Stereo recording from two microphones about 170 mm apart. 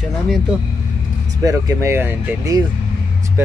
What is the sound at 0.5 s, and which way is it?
Speech, 5° right (ahead or behind).